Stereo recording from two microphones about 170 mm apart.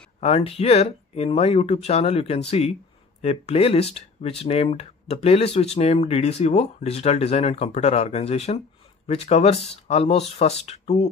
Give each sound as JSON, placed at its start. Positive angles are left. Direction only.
{"t": 0.2, "sound": "speech", "side_deg": 35}